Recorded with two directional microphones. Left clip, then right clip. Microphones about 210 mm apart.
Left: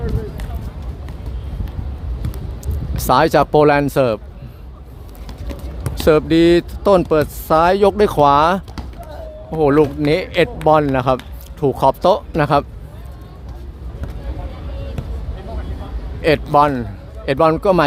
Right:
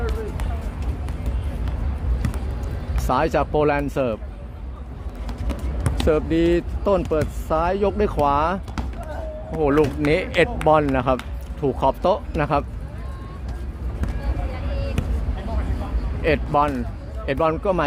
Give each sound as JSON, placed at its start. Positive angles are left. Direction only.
{"t": 3.1, "sound": "speech", "side_deg": 30}
{"t": 6.1, "sound": "speech", "side_deg": 35}
{"t": 16.2, "sound": "speech", "side_deg": 25}